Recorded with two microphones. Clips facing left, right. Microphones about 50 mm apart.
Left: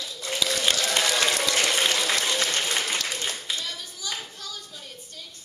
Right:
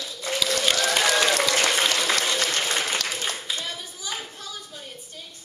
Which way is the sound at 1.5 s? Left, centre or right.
Right.